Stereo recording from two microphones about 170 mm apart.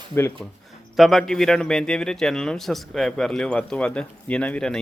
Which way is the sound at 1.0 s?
Centre (ahead or behind).